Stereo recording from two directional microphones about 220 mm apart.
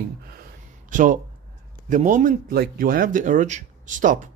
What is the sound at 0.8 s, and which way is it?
Speech, 35° right (ahead or behind).